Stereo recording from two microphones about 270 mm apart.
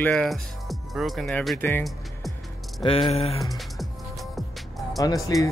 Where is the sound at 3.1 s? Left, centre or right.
Left.